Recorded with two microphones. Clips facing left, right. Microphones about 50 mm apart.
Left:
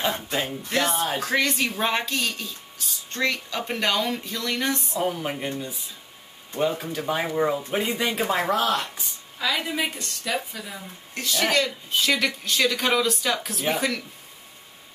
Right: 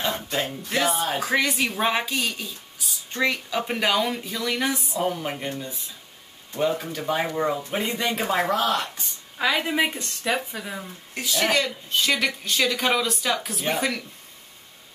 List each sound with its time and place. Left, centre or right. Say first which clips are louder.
0.3 s speech: even; centre
9.6 s a woman's voice: right 4 dB; right
11.1 s speech: even; centre